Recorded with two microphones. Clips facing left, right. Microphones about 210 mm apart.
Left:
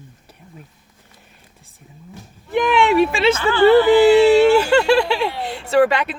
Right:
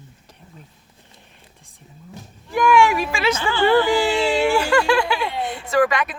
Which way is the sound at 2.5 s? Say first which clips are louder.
Left 2 dB; 25° left (ahead or behind).